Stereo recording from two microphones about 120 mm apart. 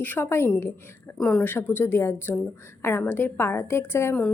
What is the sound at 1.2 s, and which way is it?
A woman's voice, 5° left (ahead or behind).